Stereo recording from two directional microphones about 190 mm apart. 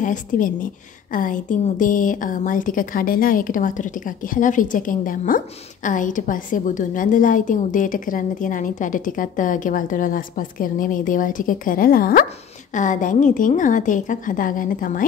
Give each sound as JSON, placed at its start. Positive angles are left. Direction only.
{"t": 0.0, "sound": "a woman's voice", "side_deg": 45}